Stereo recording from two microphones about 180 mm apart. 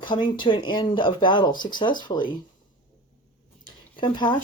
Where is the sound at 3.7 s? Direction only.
25° left (ahead or behind).